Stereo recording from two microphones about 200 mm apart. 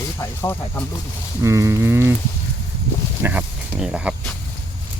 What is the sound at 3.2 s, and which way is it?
Speech, 5° right (ahead or behind).